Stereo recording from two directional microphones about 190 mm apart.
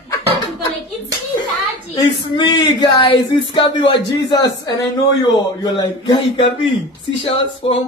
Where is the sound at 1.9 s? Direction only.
25° left (ahead or behind).